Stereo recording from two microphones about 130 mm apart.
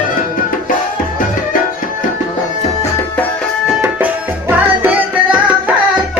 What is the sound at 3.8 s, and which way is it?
Tabla, 15° right (ahead or behind).